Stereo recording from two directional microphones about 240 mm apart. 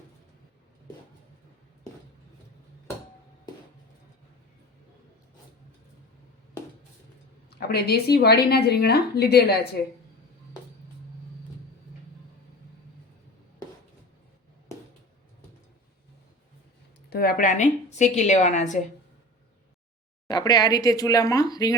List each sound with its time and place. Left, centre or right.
7.5 s a woman's voice: left
17.1 s a woman's voice: left
20.2 s speech: centre